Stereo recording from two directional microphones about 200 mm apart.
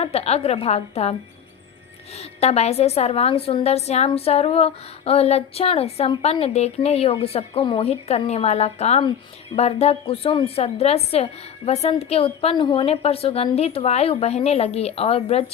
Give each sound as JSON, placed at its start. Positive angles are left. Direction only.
{"t": 0.0, "sound": "a woman's voice", "side_deg": 30}
{"t": 2.1, "sound": "a woman's voice", "side_deg": 30}